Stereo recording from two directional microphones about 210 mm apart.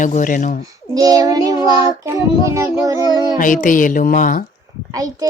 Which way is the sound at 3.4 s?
40° left (ahead or behind).